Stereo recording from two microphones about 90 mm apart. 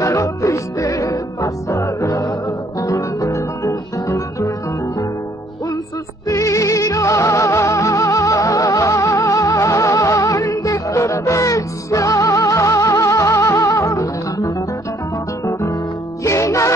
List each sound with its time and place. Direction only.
0.0 s music: 35° left (ahead or behind)
6.2 s music: 35° left (ahead or behind)
16.3 s music: 35° left (ahead or behind)